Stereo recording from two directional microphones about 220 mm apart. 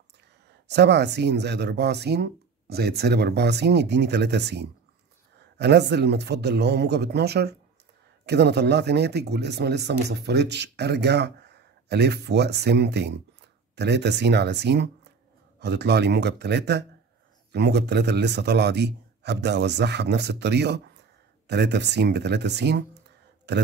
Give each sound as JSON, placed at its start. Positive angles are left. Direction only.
{"t": 0.7, "sound": "speech", "side_deg": -50}